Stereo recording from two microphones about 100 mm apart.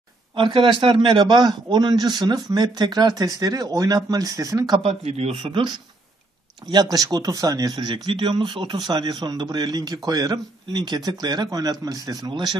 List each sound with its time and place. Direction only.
0.4 s a man's voice: 60° right (ahead or behind); by 4.7 s 35° right (ahead or behind)
4.7 s speech: 85° right
5.4 s a man's voice: 55° right (ahead or behind)
6.7 s a man's voice: 40° right (ahead or behind)